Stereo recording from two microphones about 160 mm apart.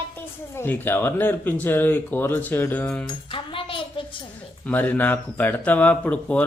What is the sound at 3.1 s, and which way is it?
Music, 30° left (ahead or behind).